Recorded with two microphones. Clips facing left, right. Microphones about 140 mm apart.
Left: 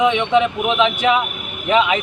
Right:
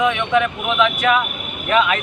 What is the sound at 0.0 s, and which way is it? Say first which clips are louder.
Speech: left 2 dB; 20° left (ahead or behind).